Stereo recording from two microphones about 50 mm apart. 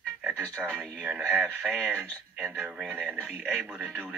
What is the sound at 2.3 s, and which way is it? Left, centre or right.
Speech, centre.